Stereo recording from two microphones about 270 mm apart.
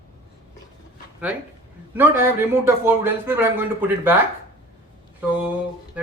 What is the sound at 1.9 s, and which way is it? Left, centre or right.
Speech, centre.